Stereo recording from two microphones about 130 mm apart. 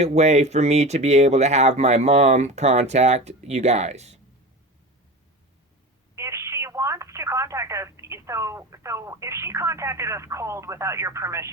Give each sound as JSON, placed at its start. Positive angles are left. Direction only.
{"t": 0.0, "sound": "speech", "side_deg": -60}
{"t": 6.1, "sound": "speech", "side_deg": -20}